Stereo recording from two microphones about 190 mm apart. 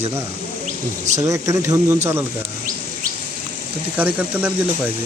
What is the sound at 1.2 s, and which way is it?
Speech, 15° right (ahead or behind).